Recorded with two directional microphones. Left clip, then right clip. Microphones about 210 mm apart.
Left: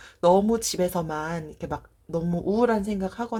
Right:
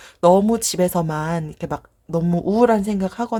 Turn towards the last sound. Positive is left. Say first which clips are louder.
# right 6 dB
turn(degrees=-35)  # may be behind; listen again after turning